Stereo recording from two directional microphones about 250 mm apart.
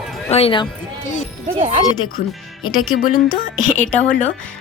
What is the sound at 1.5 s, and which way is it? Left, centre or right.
Speech, right.